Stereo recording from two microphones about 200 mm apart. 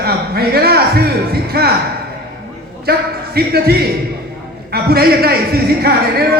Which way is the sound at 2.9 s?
50° right (ahead or behind).